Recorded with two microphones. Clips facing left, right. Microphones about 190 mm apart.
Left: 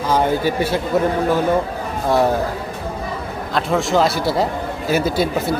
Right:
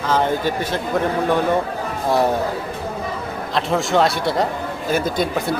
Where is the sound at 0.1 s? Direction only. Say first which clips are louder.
Left 2 dB; 10° left (ahead or behind).